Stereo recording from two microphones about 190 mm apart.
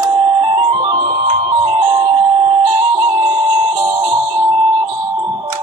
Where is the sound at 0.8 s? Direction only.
25° right (ahead or behind).